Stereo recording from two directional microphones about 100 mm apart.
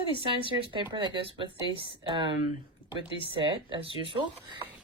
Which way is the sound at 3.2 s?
60° right (ahead or behind).